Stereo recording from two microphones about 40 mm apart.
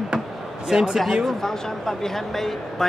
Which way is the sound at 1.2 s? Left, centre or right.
Centre.